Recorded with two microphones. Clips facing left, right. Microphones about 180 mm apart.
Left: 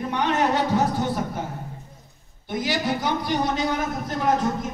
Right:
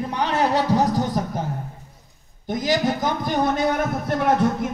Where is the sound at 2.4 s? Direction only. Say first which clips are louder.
Right 4 dB; 40° right (ahead or behind); by 4.7 s 65° right (ahead or behind).